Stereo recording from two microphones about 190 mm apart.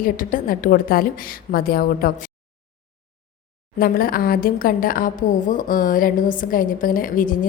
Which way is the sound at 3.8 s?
50° left (ahead or behind).